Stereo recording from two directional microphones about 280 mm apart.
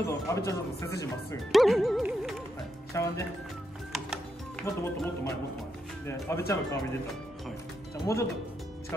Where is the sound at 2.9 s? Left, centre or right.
Centre.